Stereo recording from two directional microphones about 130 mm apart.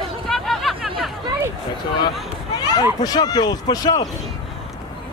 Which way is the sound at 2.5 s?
30° left (ahead or behind).